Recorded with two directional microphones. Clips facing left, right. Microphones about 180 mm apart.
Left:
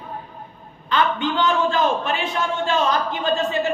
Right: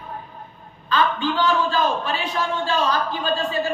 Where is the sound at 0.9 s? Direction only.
20° left (ahead or behind).